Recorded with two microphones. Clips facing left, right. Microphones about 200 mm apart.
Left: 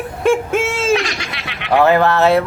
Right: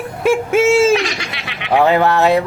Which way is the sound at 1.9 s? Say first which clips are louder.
Even; 15° right (ahead or behind).